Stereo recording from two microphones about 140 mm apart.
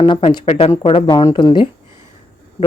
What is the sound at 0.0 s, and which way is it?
Speech, 35° left (ahead or behind).